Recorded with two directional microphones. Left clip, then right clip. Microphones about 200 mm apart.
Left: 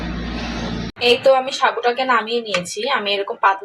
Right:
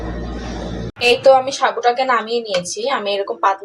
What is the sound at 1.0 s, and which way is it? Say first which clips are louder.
Speech: right 2 dB; 5° right (ahead or behind).